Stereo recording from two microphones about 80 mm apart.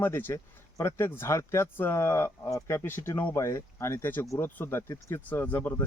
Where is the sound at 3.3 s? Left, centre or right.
Left.